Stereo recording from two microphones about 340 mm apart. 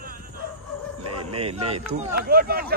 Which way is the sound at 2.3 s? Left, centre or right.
Right.